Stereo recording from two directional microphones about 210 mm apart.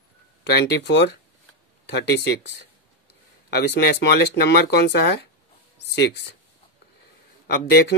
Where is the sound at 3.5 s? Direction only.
50° left (ahead or behind).